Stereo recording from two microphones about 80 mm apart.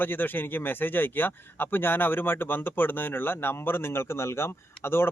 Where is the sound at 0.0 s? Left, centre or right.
Left.